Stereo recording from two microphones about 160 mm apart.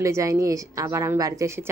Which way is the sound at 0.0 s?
20° right (ahead or behind).